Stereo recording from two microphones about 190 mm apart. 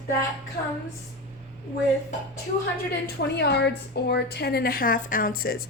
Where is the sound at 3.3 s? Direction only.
60° left (ahead or behind).